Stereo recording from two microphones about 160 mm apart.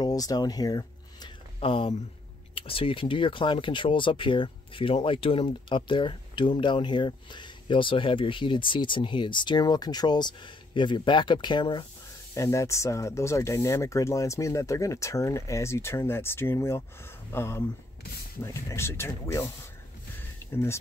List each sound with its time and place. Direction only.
0.0 s speech: 25° left (ahead or behind)
1.6 s speech: 35° left (ahead or behind)
12.4 s speech: 20° left (ahead or behind)